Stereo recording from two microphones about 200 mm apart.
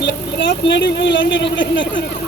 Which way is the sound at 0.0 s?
65° left (ahead or behind).